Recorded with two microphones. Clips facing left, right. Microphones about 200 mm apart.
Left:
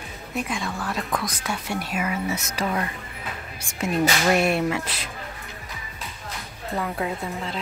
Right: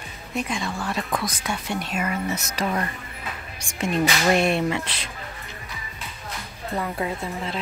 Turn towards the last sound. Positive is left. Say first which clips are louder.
# even
turn(degrees=0)  # may be behind; listen again after turning